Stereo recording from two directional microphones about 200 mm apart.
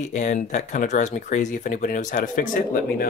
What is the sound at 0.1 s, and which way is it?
Speech, 40° left (ahead or behind).